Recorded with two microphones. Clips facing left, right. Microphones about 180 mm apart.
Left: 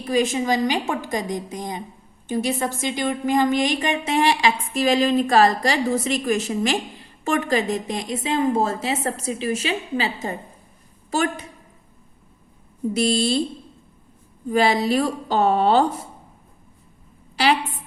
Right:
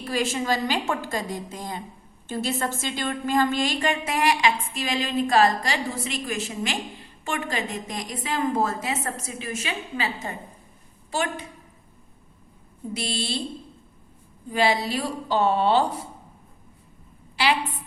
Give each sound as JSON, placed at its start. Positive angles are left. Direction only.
{"t": 0.0, "sound": "a woman's voice", "side_deg": 20}
{"t": 11.1, "sound": "a woman's voice", "side_deg": 45}
{"t": 12.9, "sound": "a woman's voice", "side_deg": 45}
{"t": 14.5, "sound": "a woman's voice", "side_deg": 45}